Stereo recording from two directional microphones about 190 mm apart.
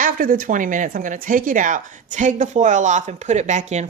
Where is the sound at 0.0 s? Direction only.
45° right (ahead or behind).